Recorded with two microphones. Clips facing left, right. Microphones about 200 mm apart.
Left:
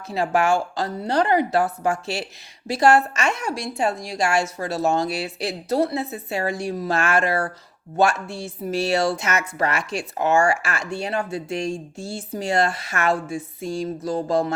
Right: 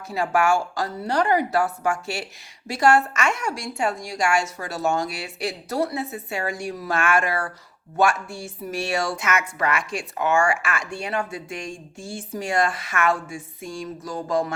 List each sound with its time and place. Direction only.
0.1 s speech: 25° left (ahead or behind)